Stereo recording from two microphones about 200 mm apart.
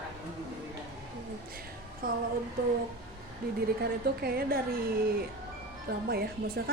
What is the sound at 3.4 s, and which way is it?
A woman's voice, 50° right (ahead or behind).